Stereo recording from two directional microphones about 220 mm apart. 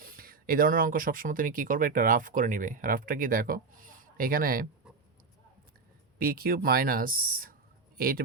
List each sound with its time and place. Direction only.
0.0 s speech: 40° right (ahead or behind)
6.1 s speech: 45° right (ahead or behind)